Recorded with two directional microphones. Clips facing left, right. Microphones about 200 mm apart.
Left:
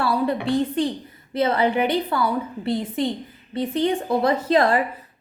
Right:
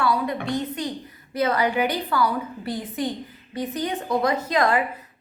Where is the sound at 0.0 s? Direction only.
30° left (ahead or behind).